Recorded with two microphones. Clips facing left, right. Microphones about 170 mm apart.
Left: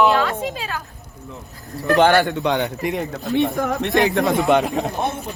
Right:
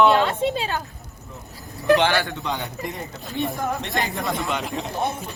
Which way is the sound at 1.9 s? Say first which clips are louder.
Left 5 dB; 45° left (ahead or behind).